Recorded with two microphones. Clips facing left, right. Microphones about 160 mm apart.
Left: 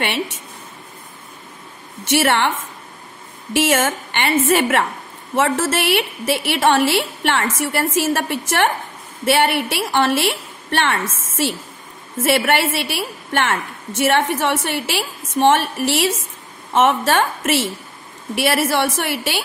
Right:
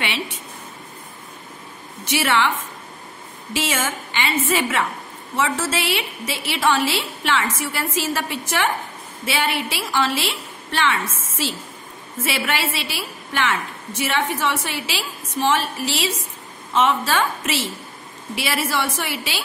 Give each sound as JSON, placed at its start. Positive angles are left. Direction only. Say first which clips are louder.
{"t": 2.2, "sound": "a woman's voice", "louder": "left 1 dB", "side_deg": 55}
{"t": 3.6, "sound": "a woman's voice", "louder": "left 7 dB", "side_deg": 55}